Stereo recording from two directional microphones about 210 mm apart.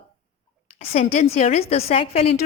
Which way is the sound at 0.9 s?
30° left (ahead or behind).